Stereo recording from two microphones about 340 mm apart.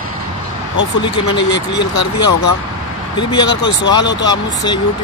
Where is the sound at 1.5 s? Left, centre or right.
Left.